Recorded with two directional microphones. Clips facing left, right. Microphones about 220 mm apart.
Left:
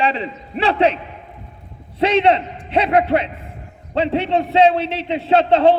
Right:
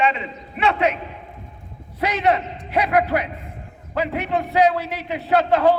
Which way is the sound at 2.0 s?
25° left (ahead or behind).